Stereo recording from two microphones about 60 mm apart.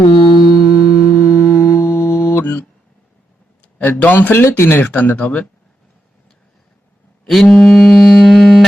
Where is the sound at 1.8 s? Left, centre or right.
Left.